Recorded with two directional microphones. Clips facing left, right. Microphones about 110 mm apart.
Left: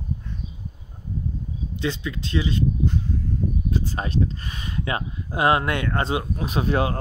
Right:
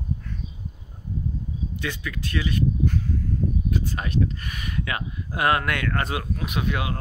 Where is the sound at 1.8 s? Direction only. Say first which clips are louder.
Left 6 dB; 25° left (ahead or behind).